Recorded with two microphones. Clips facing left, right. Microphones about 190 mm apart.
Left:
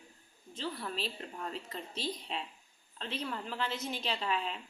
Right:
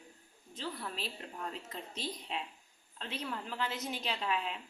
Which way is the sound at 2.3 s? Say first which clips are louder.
Even; 5° right (ahead or behind).